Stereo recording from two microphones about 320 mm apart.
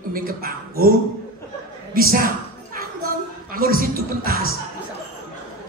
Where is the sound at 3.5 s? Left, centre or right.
Right.